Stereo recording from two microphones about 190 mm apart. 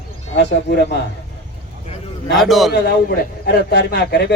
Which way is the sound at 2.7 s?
65° left (ahead or behind).